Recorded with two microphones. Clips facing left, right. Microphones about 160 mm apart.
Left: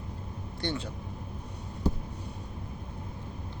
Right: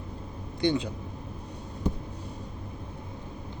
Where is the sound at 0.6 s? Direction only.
15° right (ahead or behind).